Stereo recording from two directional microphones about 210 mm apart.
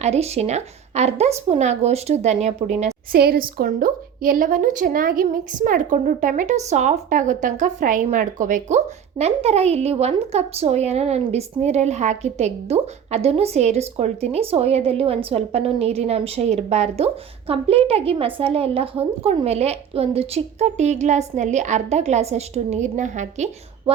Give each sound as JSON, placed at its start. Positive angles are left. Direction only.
{"t": 0.0, "sound": "a woman's voice", "side_deg": -30}
{"t": 3.1, "sound": "a woman's voice", "side_deg": -45}